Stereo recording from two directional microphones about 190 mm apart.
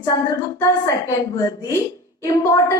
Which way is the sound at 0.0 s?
15° left (ahead or behind).